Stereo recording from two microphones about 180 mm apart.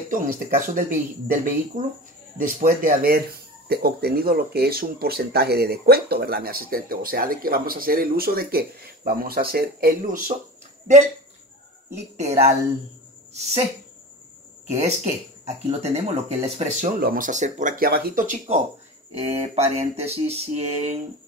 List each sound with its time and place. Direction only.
0.1 s speech: 50° right (ahead or behind)
12.0 s mantra: 40° right (ahead or behind)
13.3 s speech: 35° right (ahead or behind)
14.7 s mantra: 40° right (ahead or behind)
17.0 s speech: 50° right (ahead or behind)
19.1 s mantra: 35° right (ahead or behind)